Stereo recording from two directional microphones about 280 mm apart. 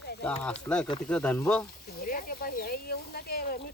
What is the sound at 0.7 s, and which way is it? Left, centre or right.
Speech, centre.